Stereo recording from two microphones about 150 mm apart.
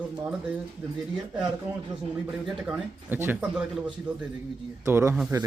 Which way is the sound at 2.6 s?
10° right (ahead or behind).